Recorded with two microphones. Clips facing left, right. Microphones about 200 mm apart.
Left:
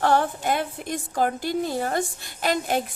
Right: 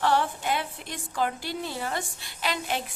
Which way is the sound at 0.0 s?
45° left (ahead or behind).